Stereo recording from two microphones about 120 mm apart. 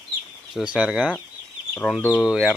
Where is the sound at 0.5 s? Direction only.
10° right (ahead or behind).